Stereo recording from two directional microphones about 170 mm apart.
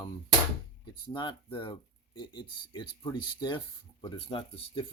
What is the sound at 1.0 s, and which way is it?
Speech, 30° left (ahead or behind).